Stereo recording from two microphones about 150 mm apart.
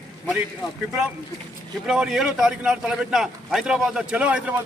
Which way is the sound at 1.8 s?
5° right (ahead or behind).